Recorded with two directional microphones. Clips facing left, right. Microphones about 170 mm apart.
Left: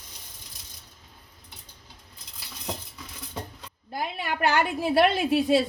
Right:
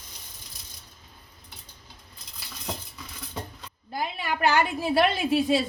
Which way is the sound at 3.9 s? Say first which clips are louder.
Even; 50° left (ahead or behind).